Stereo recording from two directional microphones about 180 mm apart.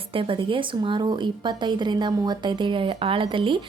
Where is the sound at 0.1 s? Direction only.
30° right (ahead or behind).